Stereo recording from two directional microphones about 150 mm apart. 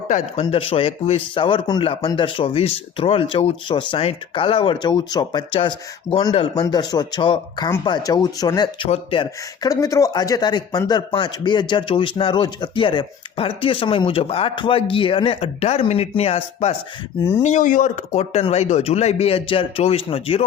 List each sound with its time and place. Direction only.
0.1 s speech: 40° left (ahead or behind)
6.6 s speech: 30° left (ahead or behind)
9.6 s speech: 20° left (ahead or behind); by 16.7 s 45° left (ahead or behind)
17.4 s speech: 55° left (ahead or behind); by 20.4 s 40° left (ahead or behind)